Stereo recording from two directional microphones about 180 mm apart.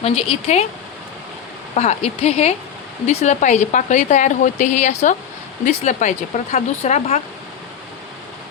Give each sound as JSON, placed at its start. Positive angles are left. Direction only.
{"t": 0.0, "sound": "speech", "side_deg": 35}
{"t": 1.7, "sound": "speech", "side_deg": 40}